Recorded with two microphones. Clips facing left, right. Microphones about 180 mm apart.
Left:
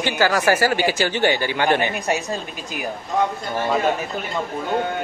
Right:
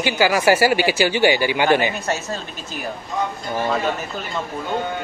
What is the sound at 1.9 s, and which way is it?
Speech, 15° left (ahead or behind).